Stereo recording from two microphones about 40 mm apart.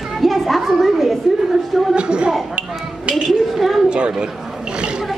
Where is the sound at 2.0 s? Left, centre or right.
Right.